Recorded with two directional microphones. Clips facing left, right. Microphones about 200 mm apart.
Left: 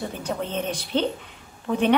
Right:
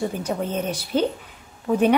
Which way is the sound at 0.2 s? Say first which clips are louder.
Right 2 dB; 10° right (ahead or behind).